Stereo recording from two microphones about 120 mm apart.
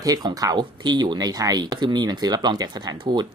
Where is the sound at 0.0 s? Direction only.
35° right (ahead or behind).